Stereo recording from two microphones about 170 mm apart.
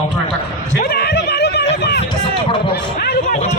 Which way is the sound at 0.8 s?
65° left (ahead or behind).